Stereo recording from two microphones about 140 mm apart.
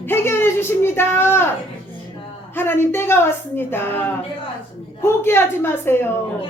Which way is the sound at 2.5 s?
15° left (ahead or behind).